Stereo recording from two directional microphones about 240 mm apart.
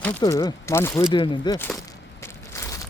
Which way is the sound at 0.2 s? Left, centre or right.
Centre.